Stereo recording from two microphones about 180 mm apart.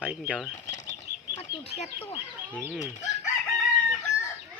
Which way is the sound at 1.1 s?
60° right (ahead or behind).